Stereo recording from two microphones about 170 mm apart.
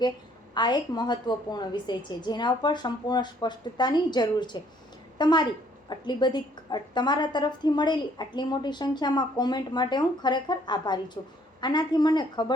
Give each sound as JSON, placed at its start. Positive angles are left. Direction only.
{"t": 0.5, "sound": "a woman's voice", "side_deg": 25}